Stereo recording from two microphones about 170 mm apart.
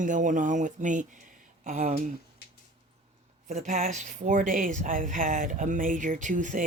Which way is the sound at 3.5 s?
45° right (ahead or behind).